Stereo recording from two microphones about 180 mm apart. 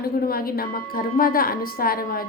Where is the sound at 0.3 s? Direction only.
55° left (ahead or behind).